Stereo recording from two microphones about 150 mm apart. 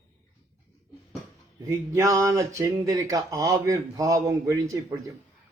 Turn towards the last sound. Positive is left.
turn(degrees=-20)  # may be behind; listen again after turning